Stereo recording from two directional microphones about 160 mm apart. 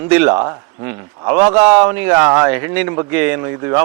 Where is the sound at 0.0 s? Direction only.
15° right (ahead or behind).